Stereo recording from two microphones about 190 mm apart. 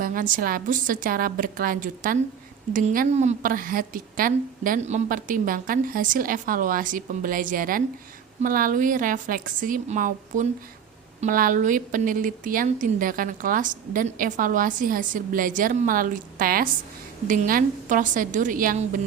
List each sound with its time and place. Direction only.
0.0 s a woman's voice: 45° right (ahead or behind)